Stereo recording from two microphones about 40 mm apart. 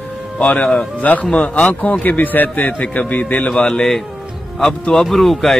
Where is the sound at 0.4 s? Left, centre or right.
Left.